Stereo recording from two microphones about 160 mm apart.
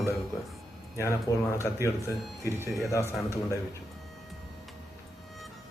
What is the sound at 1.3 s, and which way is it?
Speech, 25° left (ahead or behind).